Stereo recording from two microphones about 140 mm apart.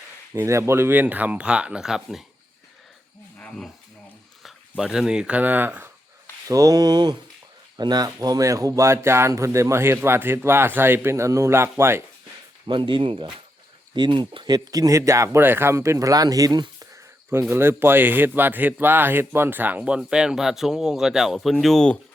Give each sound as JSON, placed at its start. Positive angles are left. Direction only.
{"t": 0.3, "sound": "speech", "side_deg": -20}
{"t": 3.3, "sound": "cricket", "side_deg": 10}
{"t": 4.8, "sound": "speech", "side_deg": -5}
{"t": 6.5, "sound": "speech", "side_deg": -25}
{"t": 12.6, "sound": "speech", "side_deg": -35}